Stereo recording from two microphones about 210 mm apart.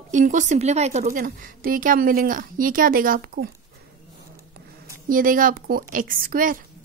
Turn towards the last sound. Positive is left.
turn(degrees=-40)  # may be behind; listen again after turning